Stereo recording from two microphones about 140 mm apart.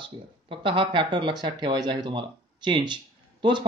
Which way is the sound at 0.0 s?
35° right (ahead or behind).